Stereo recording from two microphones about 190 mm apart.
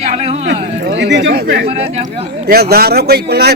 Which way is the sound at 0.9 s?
65° right (ahead or behind).